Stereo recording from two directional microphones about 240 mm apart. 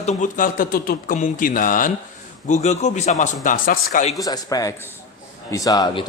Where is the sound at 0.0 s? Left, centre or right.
Left.